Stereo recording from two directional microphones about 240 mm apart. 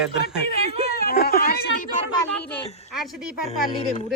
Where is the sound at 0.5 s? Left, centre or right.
Right.